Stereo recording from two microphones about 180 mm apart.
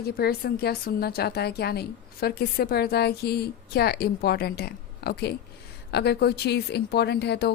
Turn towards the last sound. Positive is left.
turn(degrees=65)  # may be behind; listen again after turning